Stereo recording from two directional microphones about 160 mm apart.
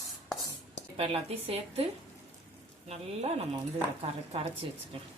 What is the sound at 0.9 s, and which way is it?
A woman's voice, 40° right (ahead or behind).